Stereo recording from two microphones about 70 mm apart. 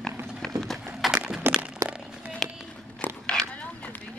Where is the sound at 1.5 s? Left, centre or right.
Right.